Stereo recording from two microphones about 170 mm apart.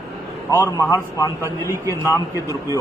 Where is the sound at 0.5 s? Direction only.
15° left (ahead or behind).